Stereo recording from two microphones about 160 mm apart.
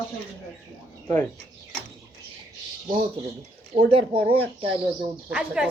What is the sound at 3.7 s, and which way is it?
Speech, 35° right (ahead or behind).